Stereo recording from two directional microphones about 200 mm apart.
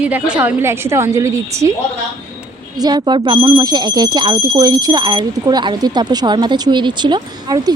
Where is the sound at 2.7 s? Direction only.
20° right (ahead or behind).